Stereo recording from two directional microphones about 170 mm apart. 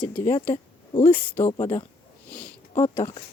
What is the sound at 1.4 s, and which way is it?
Speech, 15° left (ahead or behind).